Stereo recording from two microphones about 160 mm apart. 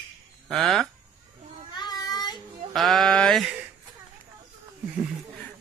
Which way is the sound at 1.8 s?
25° left (ahead or behind).